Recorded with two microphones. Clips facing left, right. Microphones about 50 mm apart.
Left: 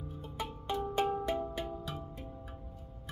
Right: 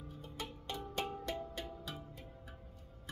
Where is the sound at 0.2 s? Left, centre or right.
Centre.